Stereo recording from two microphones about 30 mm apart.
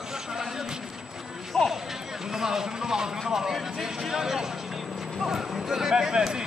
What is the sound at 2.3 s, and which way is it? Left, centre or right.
Speech, centre.